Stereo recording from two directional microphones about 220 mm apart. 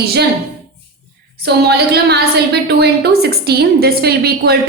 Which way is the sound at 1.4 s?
45° right (ahead or behind).